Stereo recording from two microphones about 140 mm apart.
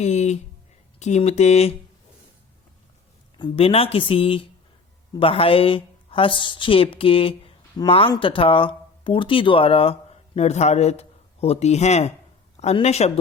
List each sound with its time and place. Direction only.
0.0 s speech: 55° left (ahead or behind)
3.3 s speech: 40° left (ahead or behind)